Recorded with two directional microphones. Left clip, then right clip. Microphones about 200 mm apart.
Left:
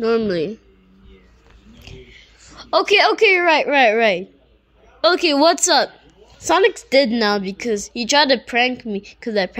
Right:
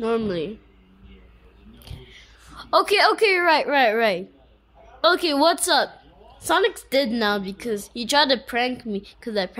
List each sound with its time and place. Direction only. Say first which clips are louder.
0.0 s speech: left 6 dB; 15° left (ahead or behind)
2.4 s a woman's voice: left 2 dB; 10° left (ahead or behind)